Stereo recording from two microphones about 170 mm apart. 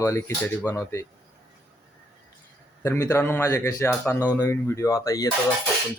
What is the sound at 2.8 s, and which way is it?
Speech, 15° left (ahead or behind).